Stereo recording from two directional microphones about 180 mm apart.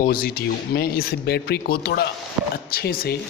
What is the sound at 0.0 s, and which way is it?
A man's voice, 55° left (ahead or behind).